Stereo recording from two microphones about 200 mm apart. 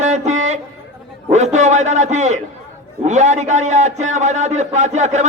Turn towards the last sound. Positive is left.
turn(degrees=-35)  # may be behind; listen again after turning